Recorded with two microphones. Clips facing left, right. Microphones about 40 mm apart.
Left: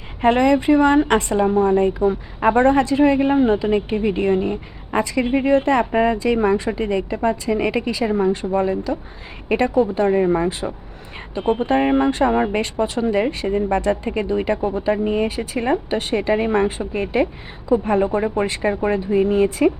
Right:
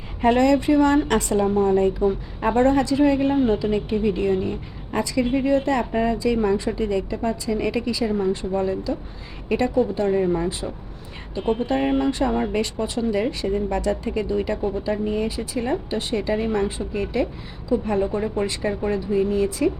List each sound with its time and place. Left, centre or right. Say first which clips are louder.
0.2 s a woman's voice: left 2 dB; left
11.3 s a woman's voice: left 4 dB; left